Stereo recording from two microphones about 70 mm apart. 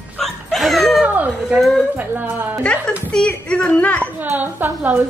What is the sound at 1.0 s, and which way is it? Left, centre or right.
Cat, right.